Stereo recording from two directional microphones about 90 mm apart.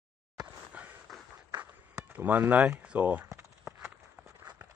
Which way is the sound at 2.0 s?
20° right (ahead or behind).